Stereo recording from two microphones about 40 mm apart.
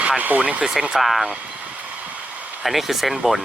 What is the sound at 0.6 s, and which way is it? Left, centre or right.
Speech, centre.